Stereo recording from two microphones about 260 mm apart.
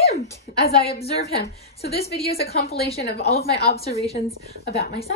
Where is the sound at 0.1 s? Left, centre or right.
Left.